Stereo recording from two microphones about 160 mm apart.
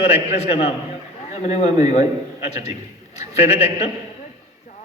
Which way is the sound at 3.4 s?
40° left (ahead or behind).